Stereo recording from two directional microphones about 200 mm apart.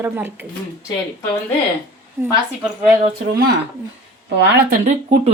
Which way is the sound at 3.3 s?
50° right (ahead or behind).